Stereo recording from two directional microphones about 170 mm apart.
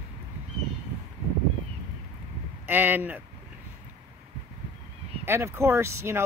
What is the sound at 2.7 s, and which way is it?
Speech, 10° right (ahead or behind).